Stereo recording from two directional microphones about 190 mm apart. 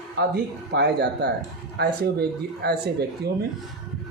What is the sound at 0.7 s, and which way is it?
A man's voice, 60° right (ahead or behind).